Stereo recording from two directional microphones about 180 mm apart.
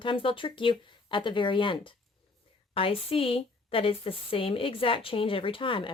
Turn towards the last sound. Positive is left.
turn(degrees=30)  # may be behind; listen again after turning